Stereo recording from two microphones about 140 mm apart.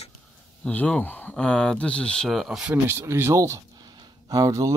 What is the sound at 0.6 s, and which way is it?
Speech, 5° left (ahead or behind).